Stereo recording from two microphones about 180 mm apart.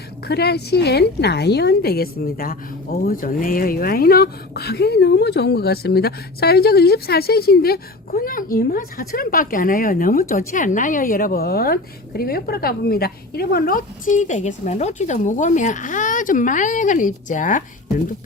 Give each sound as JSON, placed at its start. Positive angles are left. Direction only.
{"t": 0.3, "sound": "a woman's voice", "side_deg": 65}